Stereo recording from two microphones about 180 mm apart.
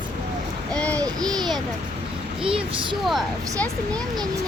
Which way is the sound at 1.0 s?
20° right (ahead or behind).